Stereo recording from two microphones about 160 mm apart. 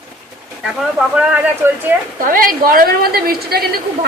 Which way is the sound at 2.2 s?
60° right (ahead or behind).